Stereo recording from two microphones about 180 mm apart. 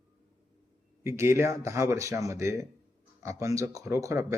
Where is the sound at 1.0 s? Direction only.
15° right (ahead or behind).